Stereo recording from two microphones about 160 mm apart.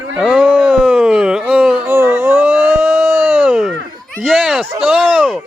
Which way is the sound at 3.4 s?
5° right (ahead or behind).